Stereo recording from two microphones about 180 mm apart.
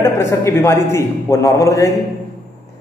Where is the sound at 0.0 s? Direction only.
15° left (ahead or behind).